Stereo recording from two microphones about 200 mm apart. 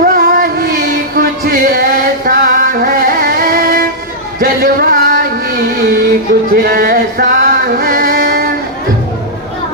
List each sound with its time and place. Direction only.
0.0 s music: 45° right (ahead or behind)
4.4 s a sound: 45° right (ahead or behind)
7.8 s music: 45° right (ahead or behind)